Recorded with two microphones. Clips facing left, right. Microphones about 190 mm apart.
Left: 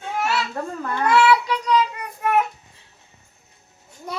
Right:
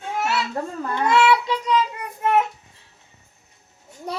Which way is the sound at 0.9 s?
25° right (ahead or behind).